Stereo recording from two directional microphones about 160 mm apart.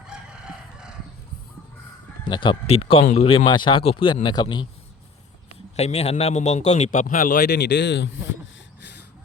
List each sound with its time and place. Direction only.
2.2 s speech: 30° left (ahead or behind)
5.7 s a man's voice: 40° left (ahead or behind); by 8.1 s 90° left